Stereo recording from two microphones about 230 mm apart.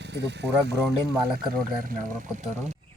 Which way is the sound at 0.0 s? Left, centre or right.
Right.